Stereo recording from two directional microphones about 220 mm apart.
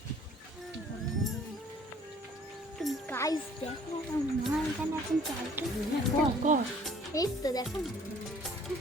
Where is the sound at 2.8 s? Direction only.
Centre (ahead or behind).